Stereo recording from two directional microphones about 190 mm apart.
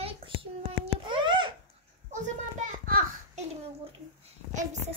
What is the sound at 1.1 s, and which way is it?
Babbling, 25° right (ahead or behind).